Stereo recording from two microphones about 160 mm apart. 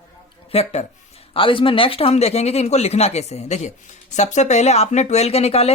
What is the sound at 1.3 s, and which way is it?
Speech, 35° left (ahead or behind).